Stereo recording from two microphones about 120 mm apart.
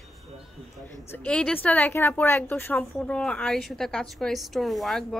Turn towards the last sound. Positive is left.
turn(degrees=5)  # may be behind; listen again after turning